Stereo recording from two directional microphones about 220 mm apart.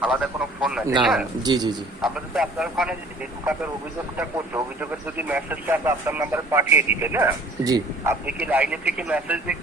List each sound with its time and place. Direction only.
0.0 s speech: 5° right (ahead or behind)
1.4 s a man's voice: 20° right (ahead or behind)
2.0 s a man's voice: centre (ahead or behind)
4.2 s speech: 5° right (ahead or behind)